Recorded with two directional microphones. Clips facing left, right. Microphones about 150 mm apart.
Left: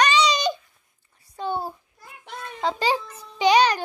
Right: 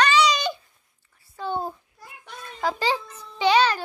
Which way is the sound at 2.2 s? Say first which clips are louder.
Left 1 dB; 25° left (ahead or behind).